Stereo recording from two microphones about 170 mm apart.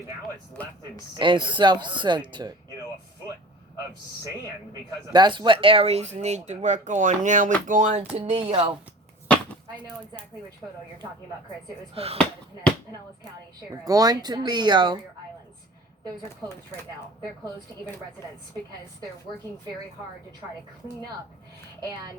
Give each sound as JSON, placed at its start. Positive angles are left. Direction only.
{"t": 1.2, "sound": "speech", "side_deg": -30}
{"t": 4.7, "sound": "speech", "side_deg": -25}
{"t": 7.7, "sound": "music", "side_deg": -45}
{"t": 8.2, "sound": "speech", "side_deg": -30}
{"t": 12.0, "sound": "speech", "side_deg": -35}
{"t": 13.8, "sound": "speech", "side_deg": -20}
{"t": 16.4, "sound": "speech", "side_deg": -25}